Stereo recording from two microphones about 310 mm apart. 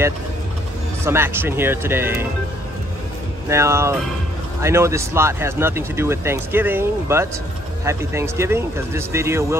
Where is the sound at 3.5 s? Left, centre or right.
Centre.